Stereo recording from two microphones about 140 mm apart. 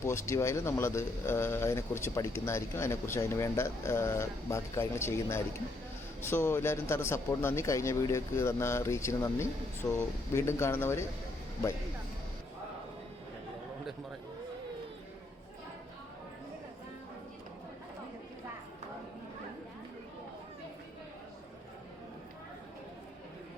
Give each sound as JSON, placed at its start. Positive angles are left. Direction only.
{"t": 0.0, "sound": "a man's voice", "side_deg": 20}